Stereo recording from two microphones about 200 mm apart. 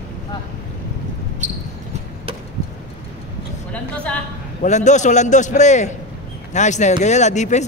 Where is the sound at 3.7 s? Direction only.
5° left (ahead or behind).